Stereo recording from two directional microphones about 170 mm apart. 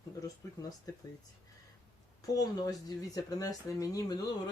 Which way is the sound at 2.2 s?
20° left (ahead or behind).